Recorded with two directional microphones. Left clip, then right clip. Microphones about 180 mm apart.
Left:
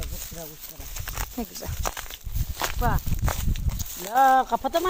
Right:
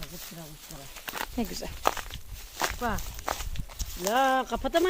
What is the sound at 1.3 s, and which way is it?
Speech, 10° right (ahead or behind).